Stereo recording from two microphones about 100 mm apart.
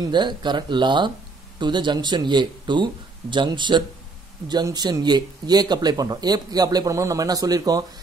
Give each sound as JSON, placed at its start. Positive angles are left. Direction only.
{"t": 0.0, "sound": "speech", "side_deg": -50}